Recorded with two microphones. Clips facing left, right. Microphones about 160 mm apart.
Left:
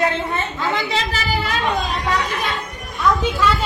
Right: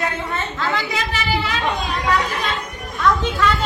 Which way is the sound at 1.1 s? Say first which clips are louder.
Even; 45° left (ahead or behind).